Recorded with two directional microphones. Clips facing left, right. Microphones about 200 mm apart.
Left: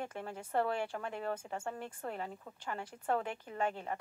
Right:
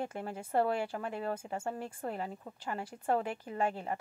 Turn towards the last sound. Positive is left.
turn(degrees=-5)  # may be behind; listen again after turning